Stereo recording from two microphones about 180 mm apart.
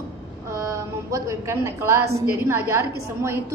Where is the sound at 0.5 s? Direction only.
15° right (ahead or behind).